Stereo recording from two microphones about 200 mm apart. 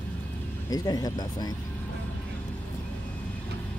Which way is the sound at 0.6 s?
20° left (ahead or behind).